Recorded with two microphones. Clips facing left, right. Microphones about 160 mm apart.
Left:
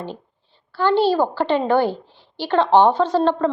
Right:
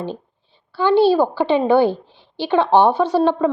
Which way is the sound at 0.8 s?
15° right (ahead or behind).